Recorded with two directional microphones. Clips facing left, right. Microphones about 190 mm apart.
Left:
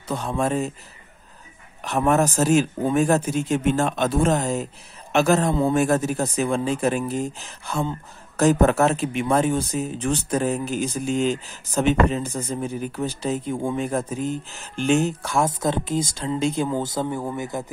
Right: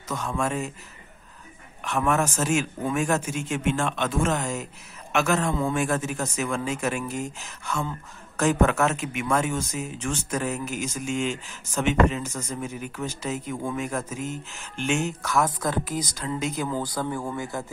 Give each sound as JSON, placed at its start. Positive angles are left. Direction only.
{"t": 0.1, "sound": "speech", "side_deg": 35}
{"t": 1.8, "sound": "speech", "side_deg": 35}